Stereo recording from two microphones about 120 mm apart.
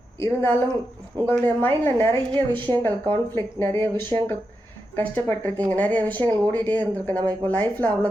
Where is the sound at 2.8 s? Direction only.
20° left (ahead or behind).